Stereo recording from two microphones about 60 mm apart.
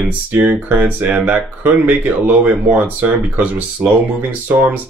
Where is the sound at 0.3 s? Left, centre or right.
Right.